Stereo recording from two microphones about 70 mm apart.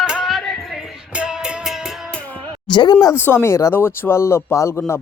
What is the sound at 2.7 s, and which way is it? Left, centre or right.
Speech, left.